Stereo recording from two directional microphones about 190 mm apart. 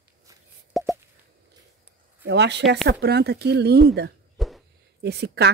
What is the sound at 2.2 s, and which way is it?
Speech, 65° right (ahead or behind).